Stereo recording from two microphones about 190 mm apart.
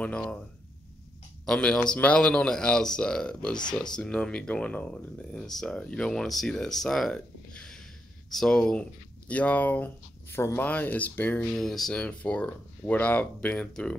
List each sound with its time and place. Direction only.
0.0 s speech: 5° left (ahead or behind)
1.4 s speech: 5° left (ahead or behind)